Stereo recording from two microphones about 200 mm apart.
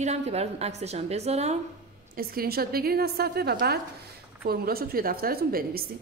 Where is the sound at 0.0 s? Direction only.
35° right (ahead or behind).